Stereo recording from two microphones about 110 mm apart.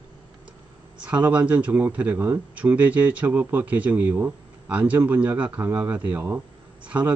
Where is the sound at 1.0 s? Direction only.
15° right (ahead or behind).